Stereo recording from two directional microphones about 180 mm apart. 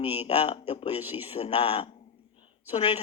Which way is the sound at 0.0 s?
35° left (ahead or behind).